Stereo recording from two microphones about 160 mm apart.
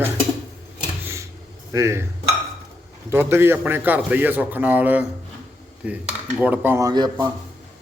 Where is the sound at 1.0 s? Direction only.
15° right (ahead or behind).